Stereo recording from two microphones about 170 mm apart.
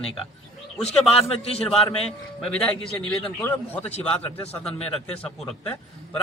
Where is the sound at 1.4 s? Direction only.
35° left (ahead or behind).